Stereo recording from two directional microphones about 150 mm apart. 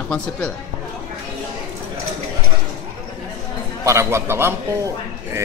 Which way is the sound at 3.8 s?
20° right (ahead or behind).